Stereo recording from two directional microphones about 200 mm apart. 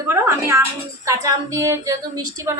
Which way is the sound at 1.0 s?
15° right (ahead or behind).